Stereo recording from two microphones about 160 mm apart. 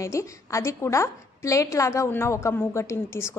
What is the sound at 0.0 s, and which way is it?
A woman's voice, 20° left (ahead or behind).